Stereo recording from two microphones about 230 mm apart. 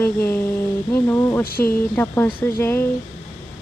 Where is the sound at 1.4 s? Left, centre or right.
Left.